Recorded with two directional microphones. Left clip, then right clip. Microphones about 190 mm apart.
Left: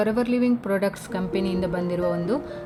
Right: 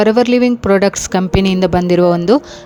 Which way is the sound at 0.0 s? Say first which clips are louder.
Right 12 dB; 45° right (ahead or behind).